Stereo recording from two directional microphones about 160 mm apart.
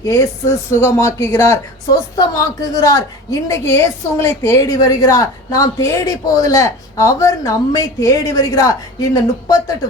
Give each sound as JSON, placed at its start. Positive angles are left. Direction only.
{"t": 0.0, "sound": "a woman's voice", "side_deg": 20}